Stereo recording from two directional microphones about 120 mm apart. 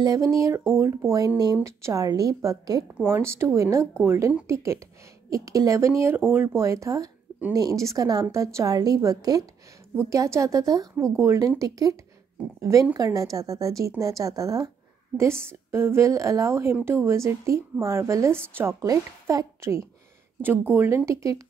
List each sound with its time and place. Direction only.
0.0 s a woman's voice: 30° right (ahead or behind)